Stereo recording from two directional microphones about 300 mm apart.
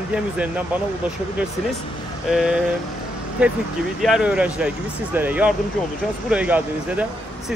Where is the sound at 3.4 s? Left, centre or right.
Centre.